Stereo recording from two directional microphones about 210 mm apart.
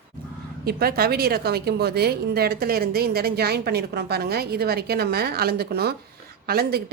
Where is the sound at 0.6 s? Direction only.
45° right (ahead or behind).